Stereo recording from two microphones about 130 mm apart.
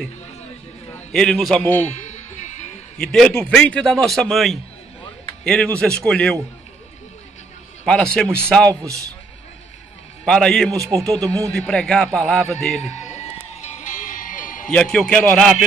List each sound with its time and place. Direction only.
0.9 s a man's voice: 5° left (ahead or behind)
2.0 s music: 60° left (ahead or behind)
3.0 s a man's voice: 5° left (ahead or behind)
7.8 s a man's voice: 5° left (ahead or behind)
10.2 s a man's voice: 5° left (ahead or behind)
10.9 s speech: 25° right (ahead or behind)
11.5 s a man's voice: 5° left (ahead or behind)
13.1 s music: 60° left (ahead or behind); by 14.7 s 90° left
14.7 s a man's voice: 5° left (ahead or behind)